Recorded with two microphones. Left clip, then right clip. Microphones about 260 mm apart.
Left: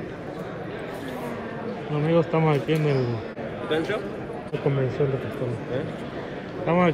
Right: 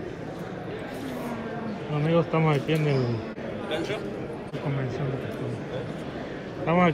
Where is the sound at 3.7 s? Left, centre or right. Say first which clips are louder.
Left 5 dB; left.